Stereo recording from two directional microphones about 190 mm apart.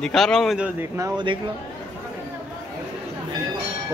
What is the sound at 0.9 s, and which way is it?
Speech, 20° right (ahead or behind).